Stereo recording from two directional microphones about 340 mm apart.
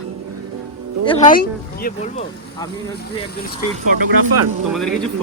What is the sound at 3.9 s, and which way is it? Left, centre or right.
Speech, right.